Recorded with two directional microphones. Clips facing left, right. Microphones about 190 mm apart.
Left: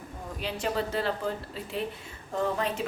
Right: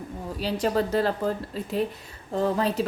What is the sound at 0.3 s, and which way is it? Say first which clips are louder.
Speech: right 6 dB; 35° right (ahead or behind).